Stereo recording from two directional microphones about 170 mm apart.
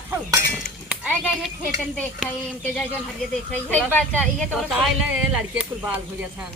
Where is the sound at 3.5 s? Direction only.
10° left (ahead or behind).